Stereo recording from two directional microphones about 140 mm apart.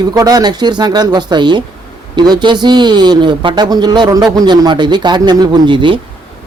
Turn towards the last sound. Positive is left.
turn(degrees=-35)  # may be behind; listen again after turning